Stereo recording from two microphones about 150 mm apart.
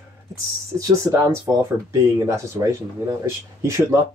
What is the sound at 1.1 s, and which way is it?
Speech, 20° right (ahead or behind).